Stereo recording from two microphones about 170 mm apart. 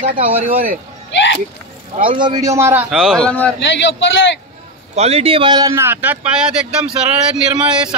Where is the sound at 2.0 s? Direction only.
30° right (ahead or behind).